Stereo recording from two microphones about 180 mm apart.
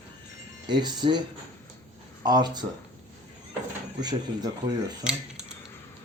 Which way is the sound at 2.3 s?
25° right (ahead or behind).